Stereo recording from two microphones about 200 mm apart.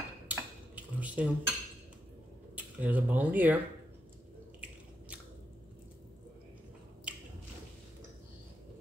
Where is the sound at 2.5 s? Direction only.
10° right (ahead or behind).